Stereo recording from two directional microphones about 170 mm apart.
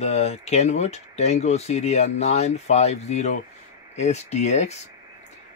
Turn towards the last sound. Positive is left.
turn(degrees=40)  # may be behind; listen again after turning